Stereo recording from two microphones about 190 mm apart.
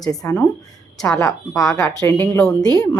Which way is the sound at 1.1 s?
15° left (ahead or behind).